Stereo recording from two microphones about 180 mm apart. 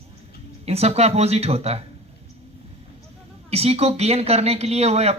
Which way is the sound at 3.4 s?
35° right (ahead or behind).